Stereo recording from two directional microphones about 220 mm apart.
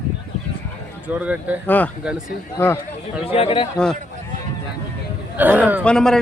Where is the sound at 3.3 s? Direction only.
25° left (ahead or behind).